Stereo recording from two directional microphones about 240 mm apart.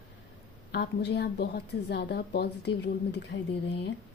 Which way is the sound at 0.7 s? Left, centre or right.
Left.